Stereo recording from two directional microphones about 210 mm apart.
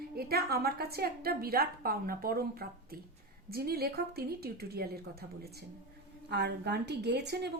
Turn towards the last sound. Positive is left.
turn(degrees=-50)  # may be behind; listen again after turning